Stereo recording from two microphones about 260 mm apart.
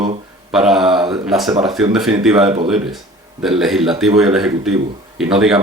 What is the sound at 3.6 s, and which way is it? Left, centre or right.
Speech, centre.